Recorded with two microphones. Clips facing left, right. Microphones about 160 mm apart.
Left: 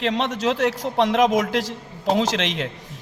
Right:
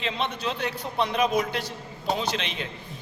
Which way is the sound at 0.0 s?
80° left.